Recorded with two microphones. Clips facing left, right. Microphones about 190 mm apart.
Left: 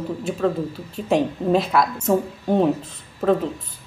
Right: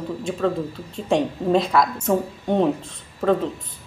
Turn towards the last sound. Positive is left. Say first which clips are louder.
# left 1 dB
turn(degrees=5)  # may be behind; listen again after turning